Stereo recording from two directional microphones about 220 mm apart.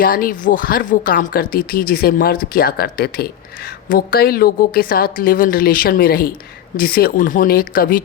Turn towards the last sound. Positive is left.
turn(degrees=40)  # may be behind; listen again after turning